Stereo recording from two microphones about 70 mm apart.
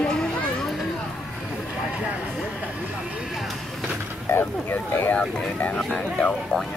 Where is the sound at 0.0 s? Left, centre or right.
Centre.